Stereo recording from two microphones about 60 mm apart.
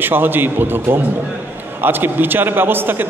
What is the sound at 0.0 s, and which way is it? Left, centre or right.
A man's voice, right.